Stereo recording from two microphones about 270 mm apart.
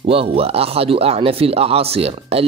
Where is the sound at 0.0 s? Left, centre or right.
Right.